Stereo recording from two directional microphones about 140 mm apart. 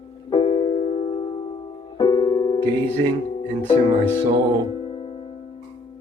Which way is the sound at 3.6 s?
40° left (ahead or behind).